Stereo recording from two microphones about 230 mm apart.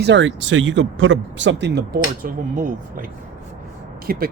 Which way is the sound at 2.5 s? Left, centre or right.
Right.